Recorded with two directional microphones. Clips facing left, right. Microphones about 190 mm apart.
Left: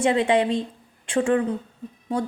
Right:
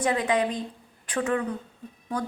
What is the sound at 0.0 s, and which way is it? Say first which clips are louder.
A woman's voice: left 5 dB; 25° left (ahead or behind).